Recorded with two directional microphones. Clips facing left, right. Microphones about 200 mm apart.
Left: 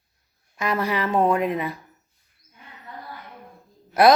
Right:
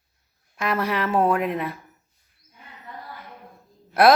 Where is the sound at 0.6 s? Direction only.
Centre (ahead or behind).